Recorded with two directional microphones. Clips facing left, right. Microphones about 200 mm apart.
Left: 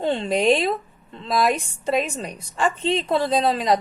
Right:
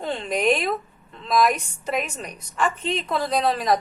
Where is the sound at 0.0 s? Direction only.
30° left (ahead or behind).